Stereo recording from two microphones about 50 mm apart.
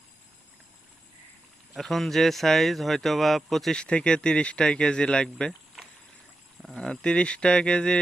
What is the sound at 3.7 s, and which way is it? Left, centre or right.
Speech, centre.